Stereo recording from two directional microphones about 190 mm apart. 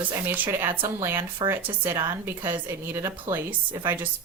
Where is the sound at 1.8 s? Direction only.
10° right (ahead or behind).